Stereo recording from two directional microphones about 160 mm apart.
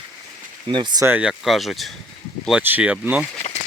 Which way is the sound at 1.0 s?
10° right (ahead or behind).